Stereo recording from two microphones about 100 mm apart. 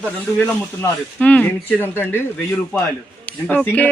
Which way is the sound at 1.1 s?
15° left (ahead or behind).